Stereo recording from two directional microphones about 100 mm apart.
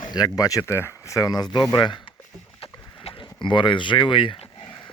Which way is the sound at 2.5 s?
65° left (ahead or behind).